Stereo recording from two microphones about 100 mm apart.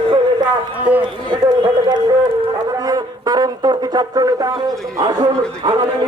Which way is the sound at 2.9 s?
40° right (ahead or behind).